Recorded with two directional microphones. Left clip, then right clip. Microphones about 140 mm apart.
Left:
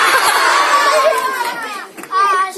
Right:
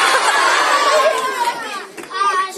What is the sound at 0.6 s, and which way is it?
Chatter, 10° left (ahead or behind).